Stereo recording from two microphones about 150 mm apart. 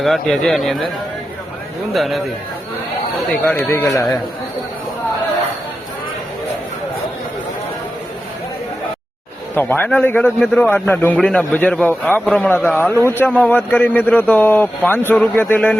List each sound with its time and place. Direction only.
0.0 s speech: centre (ahead or behind)
1.9 s speech: centre (ahead or behind)
3.4 s speech: 10° left (ahead or behind)
9.6 s speech: 15° left (ahead or behind)